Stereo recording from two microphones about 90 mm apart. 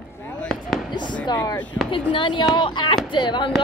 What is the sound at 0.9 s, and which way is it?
Speech, 55° left (ahead or behind).